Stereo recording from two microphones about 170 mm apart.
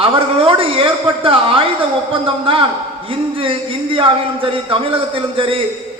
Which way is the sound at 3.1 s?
35° right (ahead or behind).